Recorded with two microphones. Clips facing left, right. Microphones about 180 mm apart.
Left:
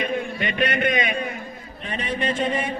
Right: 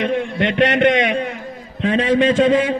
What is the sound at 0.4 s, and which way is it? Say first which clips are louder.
A man's voice: right 10 dB; 80° right.